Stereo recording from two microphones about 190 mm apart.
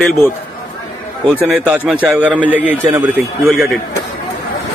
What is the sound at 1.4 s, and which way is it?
A man's voice, 5° right (ahead or behind).